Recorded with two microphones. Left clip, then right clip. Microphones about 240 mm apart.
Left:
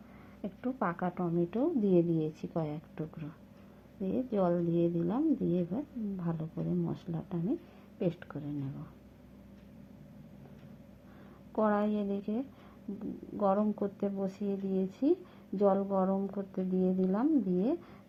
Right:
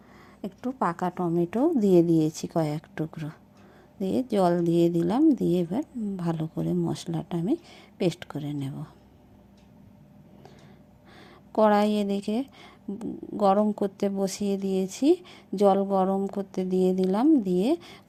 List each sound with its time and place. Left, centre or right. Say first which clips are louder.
0.4 s a woman's voice: right 6 dB; right
11.5 s a woman's voice: right 9 dB; right